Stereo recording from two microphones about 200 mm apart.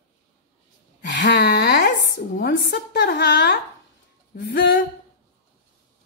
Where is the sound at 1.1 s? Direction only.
60° left (ahead or behind).